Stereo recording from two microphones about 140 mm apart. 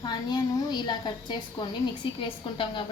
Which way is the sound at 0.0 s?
30° left (ahead or behind).